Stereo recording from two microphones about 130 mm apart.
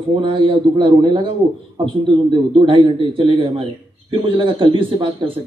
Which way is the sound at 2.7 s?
40° right (ahead or behind).